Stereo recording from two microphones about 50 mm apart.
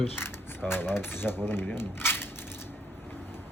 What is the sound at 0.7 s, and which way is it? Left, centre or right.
A man's voice, left.